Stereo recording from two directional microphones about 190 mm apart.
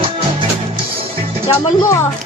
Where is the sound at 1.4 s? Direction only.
20° left (ahead or behind).